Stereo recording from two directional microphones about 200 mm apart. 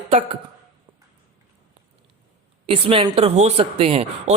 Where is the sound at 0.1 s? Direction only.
35° right (ahead or behind).